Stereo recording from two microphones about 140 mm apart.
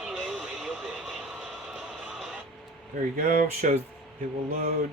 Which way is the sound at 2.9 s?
70° right (ahead or behind).